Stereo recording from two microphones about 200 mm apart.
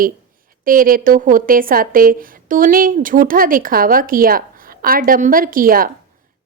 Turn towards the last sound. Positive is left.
turn(degrees=-45)  # may be behind; listen again after turning